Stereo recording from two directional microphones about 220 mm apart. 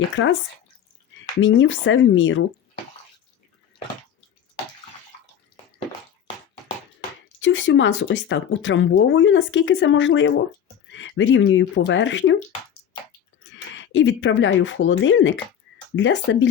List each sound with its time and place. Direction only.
0.2 s speech: 55° left (ahead or behind)
1.4 s speech: 60° left (ahead or behind)
7.3 s speech: 60° left (ahead or behind)
13.5 s speech: 55° left (ahead or behind)